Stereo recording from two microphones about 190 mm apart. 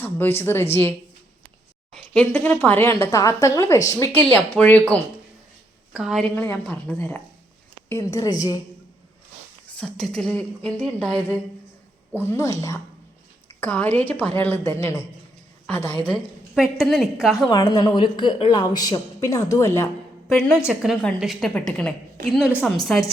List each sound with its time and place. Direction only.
0.0 s a woman's voice: 10° left (ahead or behind)
6.3 s a woman's voice: 10° left (ahead or behind)
9.7 s a woman's voice: 5° left (ahead or behind)
13.6 s speech: 10° left (ahead or behind)
16.0 s a woman's voice: centre (ahead or behind)
17.5 s a woman's voice: 20° left (ahead or behind)
20.2 s a woman's voice: centre (ahead or behind)